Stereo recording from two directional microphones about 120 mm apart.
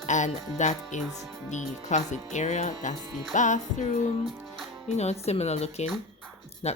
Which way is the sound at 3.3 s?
90° left.